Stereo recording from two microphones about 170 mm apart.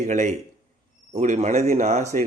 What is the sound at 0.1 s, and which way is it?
A man's voice, 45° right (ahead or behind).